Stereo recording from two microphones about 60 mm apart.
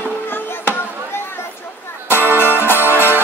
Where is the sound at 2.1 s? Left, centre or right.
Left.